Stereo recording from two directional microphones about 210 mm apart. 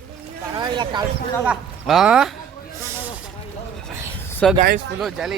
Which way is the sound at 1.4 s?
5° right (ahead or behind).